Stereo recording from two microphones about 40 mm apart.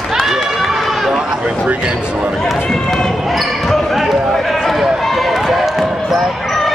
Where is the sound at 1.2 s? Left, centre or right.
Centre.